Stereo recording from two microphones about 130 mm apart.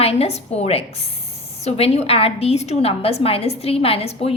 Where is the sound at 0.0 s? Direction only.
50° left (ahead or behind).